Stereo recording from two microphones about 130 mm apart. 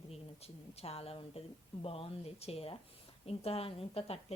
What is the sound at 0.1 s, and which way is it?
A woman's voice, 50° left (ahead or behind).